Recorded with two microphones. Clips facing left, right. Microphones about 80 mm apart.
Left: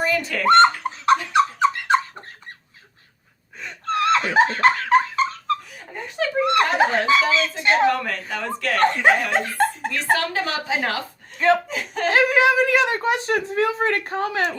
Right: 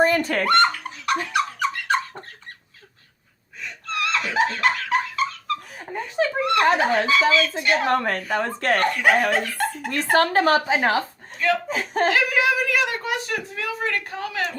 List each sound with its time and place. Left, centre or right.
0.0 s fowl: right
0.4 s a sound: left
3.6 s laughter: left
5.7 s laughter: right
6.4 s a sound: left
6.7 s speech: left
7.9 s a woman's voice: right
8.8 s speech: left
9.3 s dog: left
9.9 s a woman's voice: right
10.8 s speech: right
11.3 s speech: left
11.7 s a woman's voice: right
12.0 s speech: left